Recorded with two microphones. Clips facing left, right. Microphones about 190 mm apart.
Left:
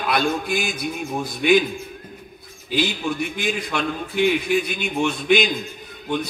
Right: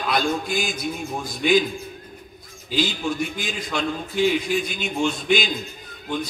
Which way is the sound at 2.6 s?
60° left (ahead or behind).